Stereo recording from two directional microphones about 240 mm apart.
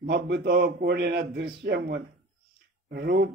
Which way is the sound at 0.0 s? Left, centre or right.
Right.